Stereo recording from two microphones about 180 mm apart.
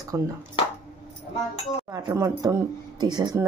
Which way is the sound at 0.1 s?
15° right (ahead or behind).